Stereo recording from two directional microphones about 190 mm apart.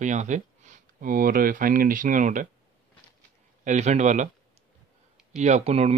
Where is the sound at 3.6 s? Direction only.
35° right (ahead or behind).